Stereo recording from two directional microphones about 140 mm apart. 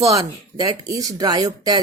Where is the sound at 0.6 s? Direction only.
25° right (ahead or behind).